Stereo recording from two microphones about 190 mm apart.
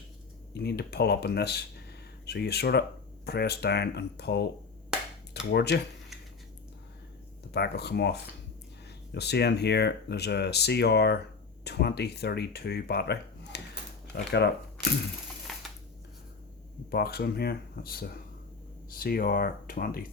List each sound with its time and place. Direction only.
0.5 s speech: 60° left (ahead or behind)
5.5 s speech: 60° left (ahead or behind)
7.5 s speech: 60° left (ahead or behind)
15.5 s a sound: centre (ahead or behind)
16.9 s speech: 55° left (ahead or behind)